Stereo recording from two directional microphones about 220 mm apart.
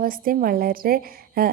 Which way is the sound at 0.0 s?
40° right (ahead or behind).